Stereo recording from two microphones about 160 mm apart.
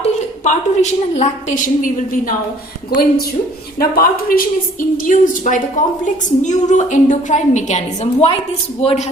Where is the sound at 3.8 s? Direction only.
65° left (ahead or behind).